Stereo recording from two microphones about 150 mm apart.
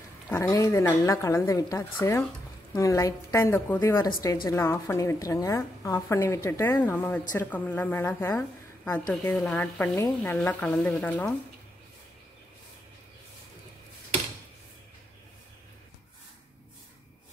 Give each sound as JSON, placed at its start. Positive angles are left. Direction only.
{"t": 0.3, "sound": "a woman's voice", "side_deg": 20}
{"t": 3.8, "sound": "a woman's voice", "side_deg": 25}